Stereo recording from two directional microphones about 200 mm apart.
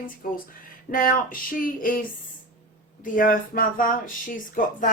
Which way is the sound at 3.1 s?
45° left (ahead or behind).